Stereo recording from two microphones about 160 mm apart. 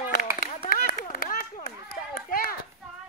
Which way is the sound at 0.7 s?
60° left (ahead or behind).